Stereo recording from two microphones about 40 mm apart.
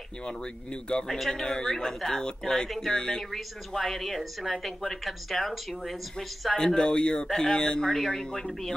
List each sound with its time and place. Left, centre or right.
0.2 s speech: left
1.0 s speech: centre
3.2 s speech: centre
6.5 s speech: centre